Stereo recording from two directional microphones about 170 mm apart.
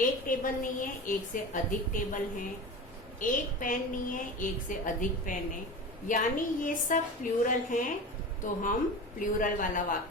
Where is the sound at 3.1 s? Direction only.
50° left (ahead or behind).